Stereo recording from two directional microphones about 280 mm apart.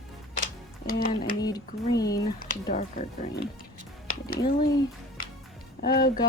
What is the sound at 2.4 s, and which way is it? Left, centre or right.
Speech, left.